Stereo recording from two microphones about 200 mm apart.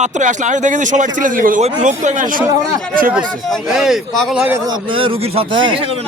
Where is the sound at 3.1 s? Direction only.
Centre (ahead or behind).